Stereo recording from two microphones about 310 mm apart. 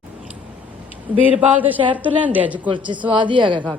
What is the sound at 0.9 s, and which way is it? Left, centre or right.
A woman's voice, centre.